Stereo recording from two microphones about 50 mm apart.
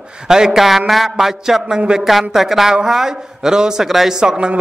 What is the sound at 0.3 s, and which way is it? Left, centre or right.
Speech, centre.